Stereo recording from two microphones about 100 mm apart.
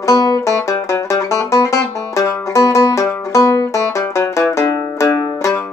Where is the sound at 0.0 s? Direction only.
40° left (ahead or behind).